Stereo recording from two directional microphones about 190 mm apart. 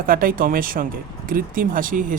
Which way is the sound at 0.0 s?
50° right (ahead or behind).